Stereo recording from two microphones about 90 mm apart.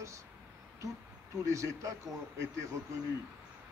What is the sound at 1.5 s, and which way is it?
Speech, 35° right (ahead or behind).